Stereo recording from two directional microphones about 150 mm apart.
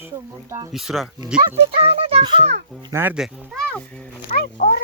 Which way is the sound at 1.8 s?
40° right (ahead or behind).